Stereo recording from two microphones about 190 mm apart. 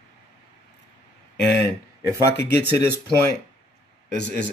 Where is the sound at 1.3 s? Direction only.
5° left (ahead or behind).